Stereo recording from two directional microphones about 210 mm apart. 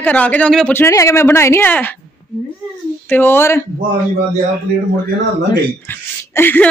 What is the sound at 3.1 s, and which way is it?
Speech, 10° left (ahead or behind).